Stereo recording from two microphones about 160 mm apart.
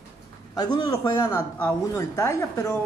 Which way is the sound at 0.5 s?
25° left (ahead or behind).